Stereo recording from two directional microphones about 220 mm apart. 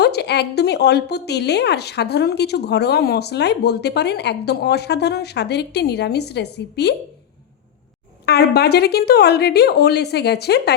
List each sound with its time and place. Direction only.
0.0 s a woman's voice: 50° left (ahead or behind)
8.3 s a woman's voice: 45° left (ahead or behind)